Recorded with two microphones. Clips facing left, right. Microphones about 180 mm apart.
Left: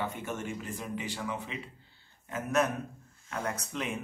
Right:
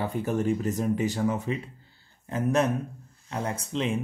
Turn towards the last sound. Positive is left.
turn(degrees=-25)  # may be behind; listen again after turning